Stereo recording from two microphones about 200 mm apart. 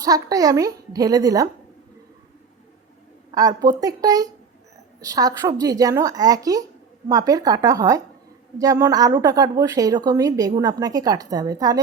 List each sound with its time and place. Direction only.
0.0 s a woman's voice: 15° right (ahead or behind)
3.3 s a woman's voice: 20° right (ahead or behind)